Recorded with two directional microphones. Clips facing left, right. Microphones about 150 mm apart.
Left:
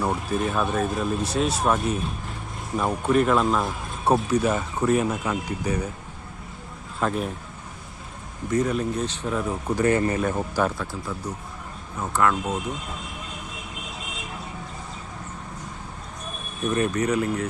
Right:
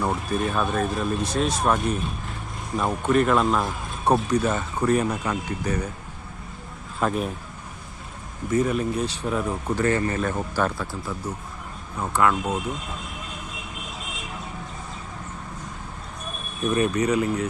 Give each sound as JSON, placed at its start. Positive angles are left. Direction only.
{"t": 0.0, "sound": "speech", "side_deg": 5}
{"t": 7.0, "sound": "speech", "side_deg": -10}
{"t": 8.4, "sound": "speech", "side_deg": -5}
{"t": 9.6, "sound": "speech", "side_deg": 15}
{"t": 11.9, "sound": "speech", "side_deg": -10}
{"t": 16.6, "sound": "speech", "side_deg": -10}